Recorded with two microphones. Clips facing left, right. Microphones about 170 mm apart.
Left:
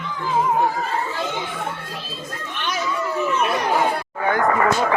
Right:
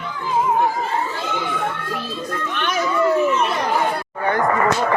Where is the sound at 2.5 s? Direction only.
60° right (ahead or behind).